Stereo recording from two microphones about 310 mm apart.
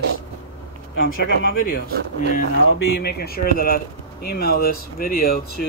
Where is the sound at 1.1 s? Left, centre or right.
Left.